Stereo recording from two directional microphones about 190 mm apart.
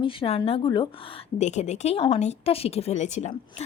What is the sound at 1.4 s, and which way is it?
Speech, 35° left (ahead or behind).